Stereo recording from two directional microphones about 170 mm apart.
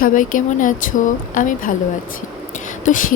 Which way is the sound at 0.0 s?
50° left (ahead or behind).